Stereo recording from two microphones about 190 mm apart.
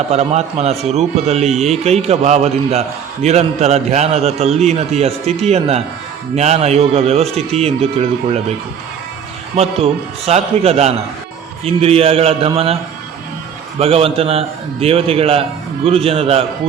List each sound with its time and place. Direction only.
0.1 s a man's voice: 35° right (ahead or behind)
9.6 s a man's voice: 30° right (ahead or behind)
13.7 s a man's voice: 30° right (ahead or behind)